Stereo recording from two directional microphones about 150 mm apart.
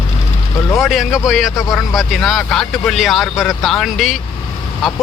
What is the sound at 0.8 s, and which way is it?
Speech, centre (ahead or behind).